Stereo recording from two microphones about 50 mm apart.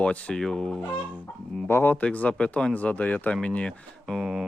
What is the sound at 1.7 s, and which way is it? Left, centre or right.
Speech, left.